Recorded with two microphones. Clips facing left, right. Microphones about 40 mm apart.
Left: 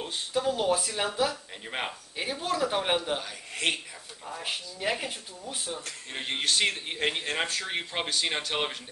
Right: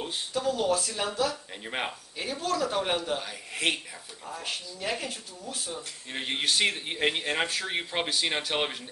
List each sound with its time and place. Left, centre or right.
0.3 s speech: centre
1.3 s speech: centre
2.4 s speech: centre
3.2 s speech: centre
4.4 s speech: centre
6.1 s speech: centre